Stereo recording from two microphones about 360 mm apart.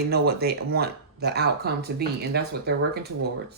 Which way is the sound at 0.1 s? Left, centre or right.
Right.